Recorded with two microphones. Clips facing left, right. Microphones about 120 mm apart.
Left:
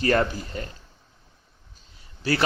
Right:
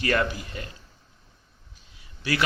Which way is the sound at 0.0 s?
35° left (ahead or behind).